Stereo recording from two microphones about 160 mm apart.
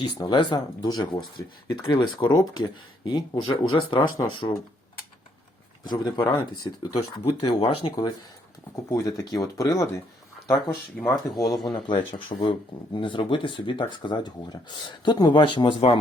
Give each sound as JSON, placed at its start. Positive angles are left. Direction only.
{"t": 0.0, "sound": "speech", "side_deg": 30}
{"t": 5.8, "sound": "speech", "side_deg": 25}
{"t": 11.4, "sound": "speech", "side_deg": 0}
{"t": 11.9, "sound": "speech", "side_deg": 30}